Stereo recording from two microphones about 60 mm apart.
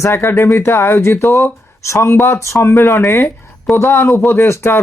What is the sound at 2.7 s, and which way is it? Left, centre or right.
Speech, left.